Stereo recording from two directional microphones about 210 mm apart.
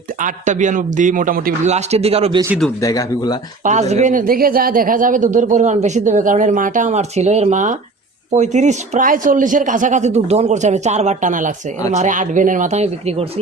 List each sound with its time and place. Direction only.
0.2 s speech: 35° right (ahead or behind)
2.8 s speech: 15° left (ahead or behind)
3.6 s speech: 35° right (ahead or behind)